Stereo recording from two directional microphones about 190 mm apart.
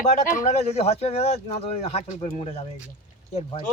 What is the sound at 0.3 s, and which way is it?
Speech, 35° left (ahead or behind).